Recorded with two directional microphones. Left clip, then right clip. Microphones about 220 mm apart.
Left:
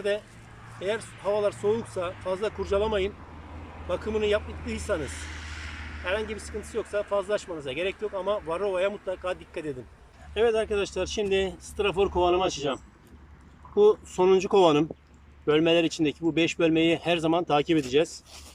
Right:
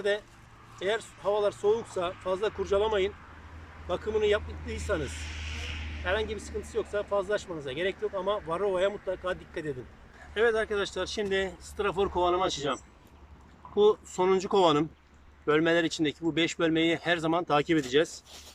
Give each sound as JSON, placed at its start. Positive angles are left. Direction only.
{"t": 0.8, "sound": "speech", "side_deg": 5}
{"t": 6.1, "sound": "speech", "side_deg": 5}